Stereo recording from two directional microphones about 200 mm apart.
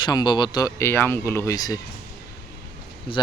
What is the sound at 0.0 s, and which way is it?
Speech, 20° left (ahead or behind).